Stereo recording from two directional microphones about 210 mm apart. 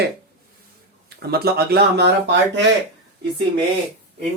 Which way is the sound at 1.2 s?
50° right (ahead or behind).